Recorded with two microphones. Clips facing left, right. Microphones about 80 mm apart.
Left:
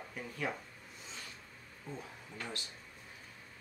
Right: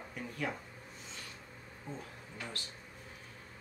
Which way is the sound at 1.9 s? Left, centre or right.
Right.